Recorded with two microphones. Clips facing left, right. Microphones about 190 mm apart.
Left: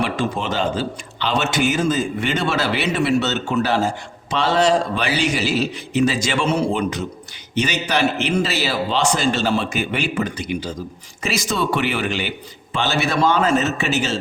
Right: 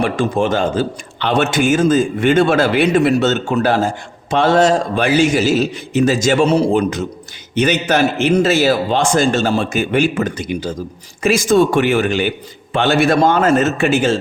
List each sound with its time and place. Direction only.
0.0 s a man's voice: 50° right (ahead or behind)
7.5 s a man's voice: 55° right (ahead or behind)